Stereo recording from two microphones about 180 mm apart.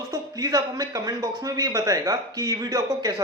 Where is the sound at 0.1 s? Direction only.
20° right (ahead or behind).